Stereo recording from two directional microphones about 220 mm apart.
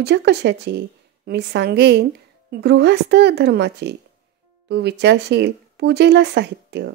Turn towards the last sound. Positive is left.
turn(degrees=-50)  # may be behind; listen again after turning